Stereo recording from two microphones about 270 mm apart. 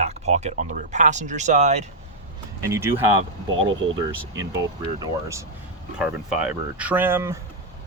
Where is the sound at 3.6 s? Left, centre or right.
Right.